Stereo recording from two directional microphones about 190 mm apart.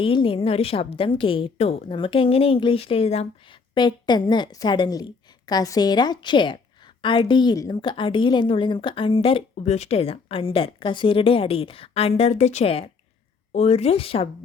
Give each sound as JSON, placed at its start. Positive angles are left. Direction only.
{"t": 0.0, "sound": "a woman's voice", "side_deg": 25}